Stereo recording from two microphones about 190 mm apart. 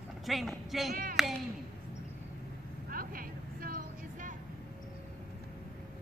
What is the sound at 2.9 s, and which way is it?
Vehicle, 50° right (ahead or behind).